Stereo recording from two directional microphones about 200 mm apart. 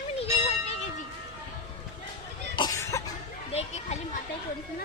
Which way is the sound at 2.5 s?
20° left (ahead or behind).